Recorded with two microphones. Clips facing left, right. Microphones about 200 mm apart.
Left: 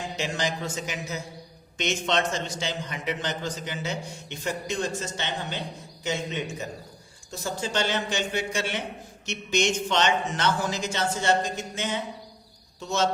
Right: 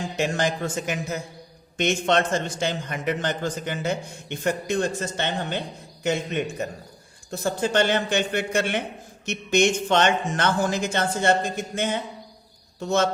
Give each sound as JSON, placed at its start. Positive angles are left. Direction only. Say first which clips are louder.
{"t": 0.2, "sound": "a man's voice", "louder": "right 6 dB", "side_deg": -55}